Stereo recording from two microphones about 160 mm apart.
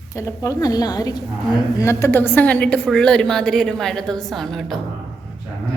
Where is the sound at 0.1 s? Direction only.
20° left (ahead or behind); by 4.8 s centre (ahead or behind).